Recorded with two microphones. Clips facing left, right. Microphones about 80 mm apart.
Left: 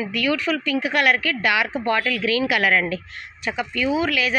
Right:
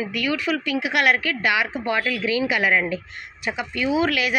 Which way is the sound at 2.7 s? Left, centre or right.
Centre.